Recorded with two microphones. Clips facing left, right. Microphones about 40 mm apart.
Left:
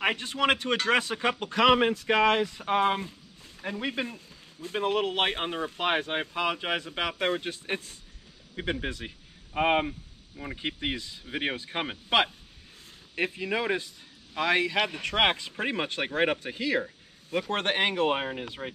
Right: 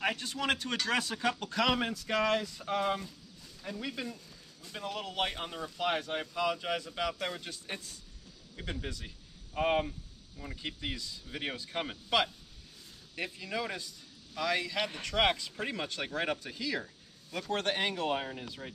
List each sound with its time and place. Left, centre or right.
0.0 s speech: left